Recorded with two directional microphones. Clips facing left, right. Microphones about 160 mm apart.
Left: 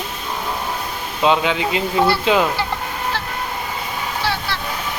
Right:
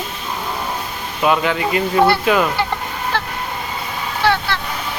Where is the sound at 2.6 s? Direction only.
60° right (ahead or behind).